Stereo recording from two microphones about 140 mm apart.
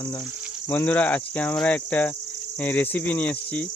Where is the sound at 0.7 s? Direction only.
10° left (ahead or behind).